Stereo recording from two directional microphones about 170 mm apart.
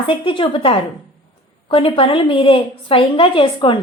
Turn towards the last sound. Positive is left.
turn(degrees=30)  # may be behind; listen again after turning